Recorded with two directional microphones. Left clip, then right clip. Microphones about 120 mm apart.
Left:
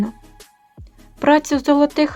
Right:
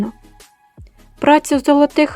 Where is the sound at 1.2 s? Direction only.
30° right (ahead or behind).